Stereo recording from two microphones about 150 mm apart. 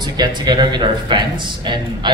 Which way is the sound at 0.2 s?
30° right (ahead or behind).